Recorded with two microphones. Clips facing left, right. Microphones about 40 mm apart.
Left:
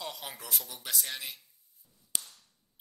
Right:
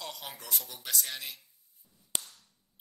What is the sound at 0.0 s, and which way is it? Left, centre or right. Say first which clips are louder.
Speech: left 1 dB; centre.